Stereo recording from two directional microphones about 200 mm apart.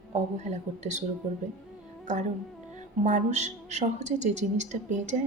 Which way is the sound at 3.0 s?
35° right (ahead or behind).